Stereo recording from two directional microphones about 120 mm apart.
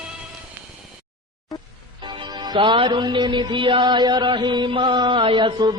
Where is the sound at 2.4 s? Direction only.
40° right (ahead or behind).